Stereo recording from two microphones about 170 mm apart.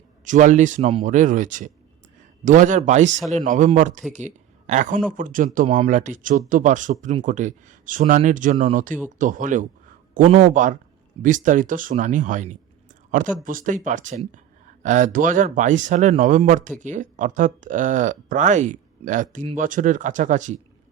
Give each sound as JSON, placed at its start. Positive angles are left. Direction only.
{"t": 0.3, "sound": "speech", "side_deg": -45}
{"t": 3.2, "sound": "speech", "side_deg": 0}
{"t": 3.4, "sound": "speech", "side_deg": -50}